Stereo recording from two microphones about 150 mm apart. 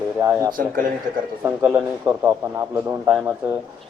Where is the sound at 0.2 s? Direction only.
20° right (ahead or behind).